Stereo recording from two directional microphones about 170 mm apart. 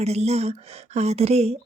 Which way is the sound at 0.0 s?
40° right (ahead or behind).